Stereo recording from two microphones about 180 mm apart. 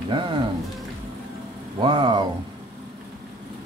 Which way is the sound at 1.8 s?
25° right (ahead or behind).